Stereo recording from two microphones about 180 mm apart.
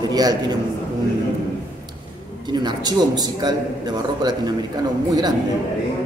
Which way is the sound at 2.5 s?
25° right (ahead or behind).